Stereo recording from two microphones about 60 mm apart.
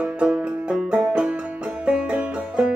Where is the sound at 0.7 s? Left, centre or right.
Centre.